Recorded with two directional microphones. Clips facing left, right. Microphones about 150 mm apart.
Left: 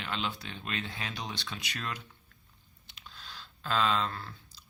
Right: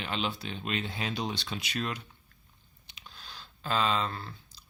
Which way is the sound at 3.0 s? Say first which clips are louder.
Even; 15° right (ahead or behind).